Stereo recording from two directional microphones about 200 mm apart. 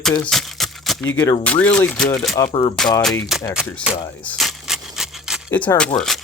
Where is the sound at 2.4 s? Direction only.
15° left (ahead or behind).